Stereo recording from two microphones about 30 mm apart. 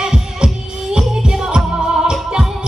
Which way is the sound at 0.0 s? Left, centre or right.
Right.